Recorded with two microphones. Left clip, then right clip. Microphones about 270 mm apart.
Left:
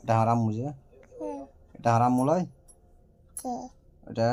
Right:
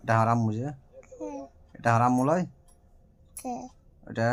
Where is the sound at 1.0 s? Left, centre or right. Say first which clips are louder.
Left 2 dB; centre.